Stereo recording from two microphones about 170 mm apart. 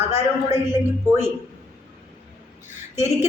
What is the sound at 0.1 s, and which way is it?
A man's voice, 15° right (ahead or behind).